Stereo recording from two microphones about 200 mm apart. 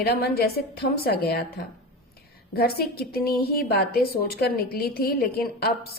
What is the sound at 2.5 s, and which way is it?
A woman's voice, 50° left (ahead or behind).